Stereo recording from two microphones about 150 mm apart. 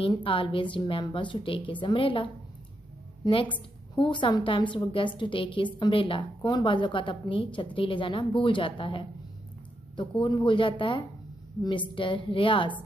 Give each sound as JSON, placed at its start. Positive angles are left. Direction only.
{"t": 0.0, "sound": "a woman's voice", "side_deg": 35}
{"t": 3.3, "sound": "a woman's voice", "side_deg": 35}